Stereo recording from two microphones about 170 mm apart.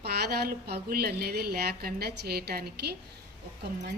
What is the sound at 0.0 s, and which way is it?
A woman's voice, 70° right (ahead or behind).